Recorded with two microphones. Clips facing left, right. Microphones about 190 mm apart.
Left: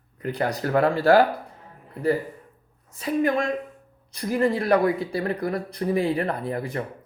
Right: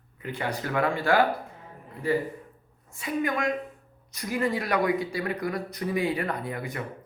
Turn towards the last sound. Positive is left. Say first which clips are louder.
# left 5 dB
turn(degrees=35)  # may be behind; listen again after turning